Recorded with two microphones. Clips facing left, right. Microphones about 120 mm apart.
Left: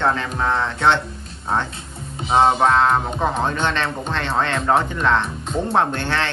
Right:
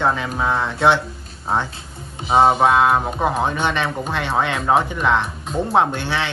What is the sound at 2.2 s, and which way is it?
Speech, centre (ahead or behind).